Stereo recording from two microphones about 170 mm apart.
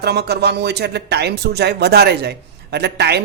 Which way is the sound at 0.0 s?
70° right (ahead or behind).